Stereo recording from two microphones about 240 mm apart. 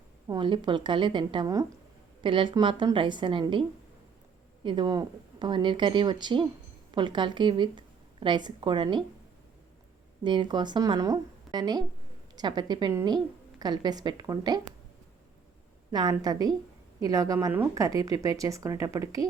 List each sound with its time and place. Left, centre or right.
0.3 s speech: centre
4.6 s speech: centre
10.2 s speech: centre
15.9 s speech: centre